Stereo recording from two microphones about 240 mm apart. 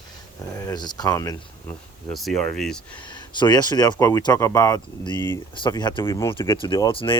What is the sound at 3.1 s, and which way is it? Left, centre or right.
Speech, centre.